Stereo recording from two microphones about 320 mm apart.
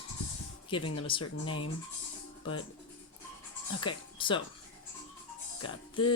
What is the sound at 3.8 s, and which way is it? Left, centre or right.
Speech, centre.